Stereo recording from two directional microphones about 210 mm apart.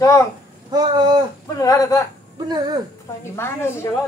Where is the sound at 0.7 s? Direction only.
20° right (ahead or behind).